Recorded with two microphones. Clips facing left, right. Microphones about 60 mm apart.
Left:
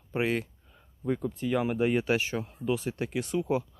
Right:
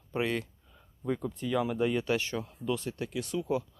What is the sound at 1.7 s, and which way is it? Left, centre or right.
Speech, left.